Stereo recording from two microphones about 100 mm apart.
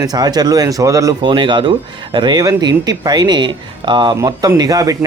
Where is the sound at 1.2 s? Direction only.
55° right (ahead or behind).